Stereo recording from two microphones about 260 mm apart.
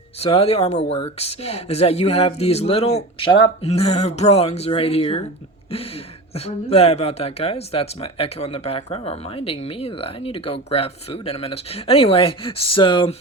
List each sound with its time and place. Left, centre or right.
0.2 s speech: left
6.3 s speech: left